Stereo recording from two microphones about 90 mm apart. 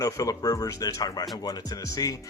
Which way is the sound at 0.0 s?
40° left (ahead or behind).